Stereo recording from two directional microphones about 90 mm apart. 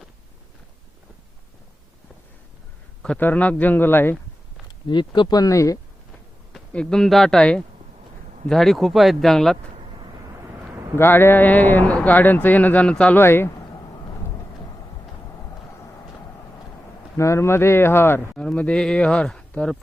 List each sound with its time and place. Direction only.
3.0 s a man's voice: 10° left (ahead or behind)
4.9 s speech: 60° left (ahead or behind); by 5.8 s 40° left (ahead or behind)
6.7 s speech: 5° left (ahead or behind)
10.9 s speech: 25° left (ahead or behind)
13.1 s speech: 25° left (ahead or behind)
17.2 s speech: 35° left (ahead or behind)
18.3 s speech: 10° left (ahead or behind)